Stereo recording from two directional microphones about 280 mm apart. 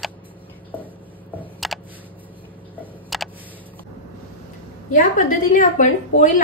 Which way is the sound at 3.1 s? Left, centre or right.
Centre.